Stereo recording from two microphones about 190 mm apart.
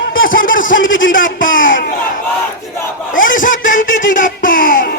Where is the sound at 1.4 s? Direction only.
85° left.